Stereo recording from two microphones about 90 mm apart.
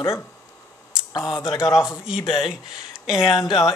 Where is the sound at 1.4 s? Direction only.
5° right (ahead or behind).